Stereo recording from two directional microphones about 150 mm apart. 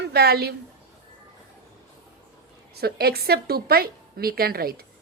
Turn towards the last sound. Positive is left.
turn(degrees=-90)